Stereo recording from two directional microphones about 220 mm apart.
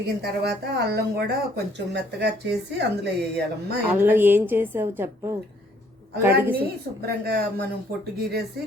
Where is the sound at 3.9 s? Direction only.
10° right (ahead or behind).